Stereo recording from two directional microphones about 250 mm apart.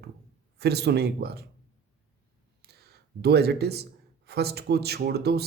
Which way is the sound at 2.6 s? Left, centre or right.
Right.